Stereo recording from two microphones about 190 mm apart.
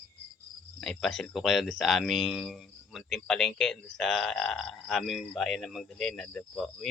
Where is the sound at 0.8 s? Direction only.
Centre (ahead or behind).